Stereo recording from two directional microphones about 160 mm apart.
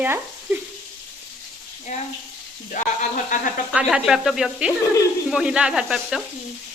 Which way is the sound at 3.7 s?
5° right (ahead or behind).